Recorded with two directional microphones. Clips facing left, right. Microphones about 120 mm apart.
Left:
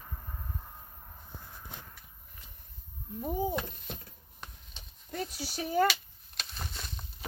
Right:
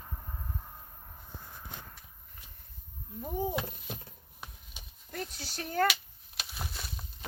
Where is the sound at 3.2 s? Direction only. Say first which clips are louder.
Left 1 dB; centre (ahead or behind).